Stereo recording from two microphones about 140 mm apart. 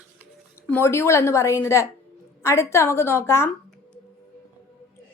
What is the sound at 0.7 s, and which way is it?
A woman's voice, 20° left (ahead or behind).